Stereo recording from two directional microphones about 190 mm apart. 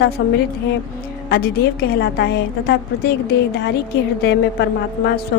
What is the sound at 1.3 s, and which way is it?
A woman's voice, 55° left (ahead or behind).